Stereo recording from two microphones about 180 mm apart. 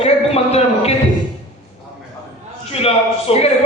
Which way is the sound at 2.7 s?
35° left (ahead or behind).